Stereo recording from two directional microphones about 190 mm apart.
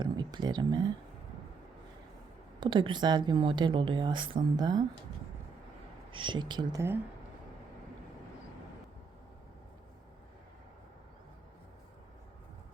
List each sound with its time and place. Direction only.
0.0 s speech: 25° right (ahead or behind)
2.6 s speech: 25° right (ahead or behind)
6.1 s speech: 25° right (ahead or behind)